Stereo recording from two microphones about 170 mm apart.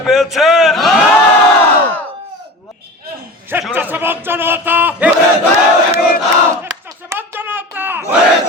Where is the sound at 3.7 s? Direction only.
10° right (ahead or behind).